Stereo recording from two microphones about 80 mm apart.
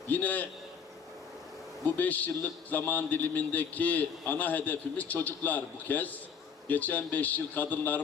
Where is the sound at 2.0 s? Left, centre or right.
Left.